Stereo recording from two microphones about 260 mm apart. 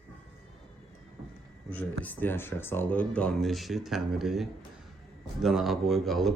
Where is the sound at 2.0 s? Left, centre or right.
Centre.